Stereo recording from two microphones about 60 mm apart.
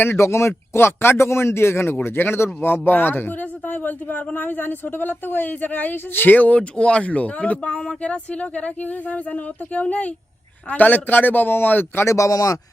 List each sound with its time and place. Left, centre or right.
0.0 s a man's voice: left
12.0 s speech: left